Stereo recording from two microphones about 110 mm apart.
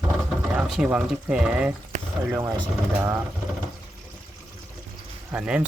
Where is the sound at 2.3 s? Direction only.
20° right (ahead or behind).